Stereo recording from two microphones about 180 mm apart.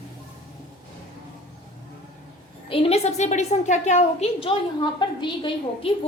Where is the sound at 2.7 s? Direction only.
30° left (ahead or behind).